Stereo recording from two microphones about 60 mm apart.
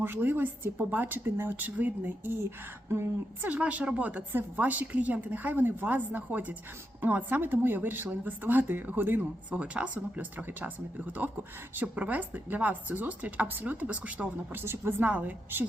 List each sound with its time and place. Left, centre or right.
0.0 s speech: right
3.4 s speech: right
14.5 s speech: right
15.0 s speech: right